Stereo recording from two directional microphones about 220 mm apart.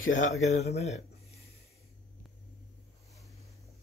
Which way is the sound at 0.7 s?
30° left (ahead or behind).